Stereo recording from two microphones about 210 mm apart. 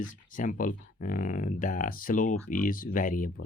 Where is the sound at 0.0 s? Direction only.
40° left (ahead or behind).